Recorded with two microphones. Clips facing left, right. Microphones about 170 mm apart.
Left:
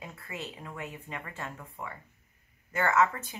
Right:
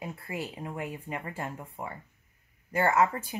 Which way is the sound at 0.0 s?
30° right (ahead or behind).